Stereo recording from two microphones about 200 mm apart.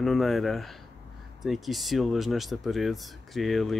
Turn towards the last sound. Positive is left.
turn(degrees=0)  # may be behind; listen again after turning